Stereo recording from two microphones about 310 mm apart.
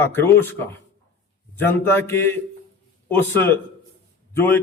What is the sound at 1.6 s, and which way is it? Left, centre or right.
Speech, centre.